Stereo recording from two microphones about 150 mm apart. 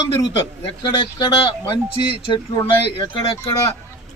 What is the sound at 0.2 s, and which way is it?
Speech, 35° left (ahead or behind).